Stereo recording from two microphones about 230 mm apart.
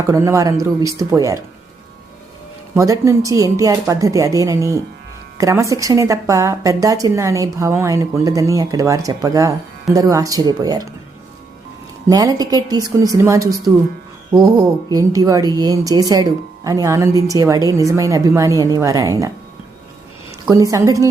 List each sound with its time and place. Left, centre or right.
0.0 s speech: centre
2.7 s speech: centre
12.0 s speech: centre
20.4 s speech: centre